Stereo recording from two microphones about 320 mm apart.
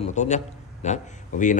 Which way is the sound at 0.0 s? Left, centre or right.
Left.